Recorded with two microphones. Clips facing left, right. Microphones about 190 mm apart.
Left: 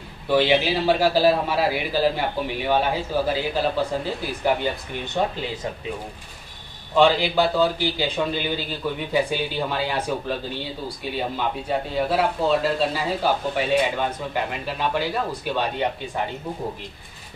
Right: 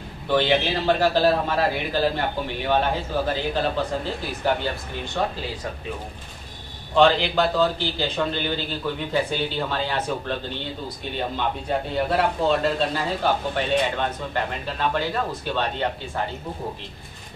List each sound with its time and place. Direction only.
0.3 s speech: 10° left (ahead or behind)
7.0 s speech: 10° left (ahead or behind)